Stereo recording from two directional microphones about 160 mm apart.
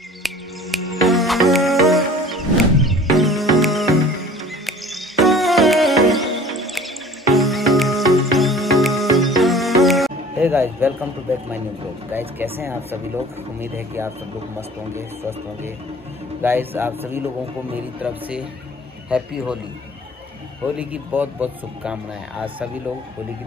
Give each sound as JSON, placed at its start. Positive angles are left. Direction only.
{"t": 0.2, "sound": "music", "side_deg": 0}
{"t": 10.4, "sound": "music", "side_deg": -15}
{"t": 12.1, "sound": "speech", "side_deg": -15}
{"t": 19.0, "sound": "speech", "side_deg": -5}
{"t": 20.7, "sound": "speech", "side_deg": -10}